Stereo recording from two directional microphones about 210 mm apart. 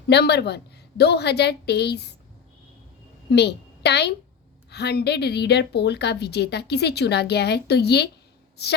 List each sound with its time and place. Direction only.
0.1 s speech: 50° left (ahead or behind)
3.2 s a woman's voice: 50° left (ahead or behind)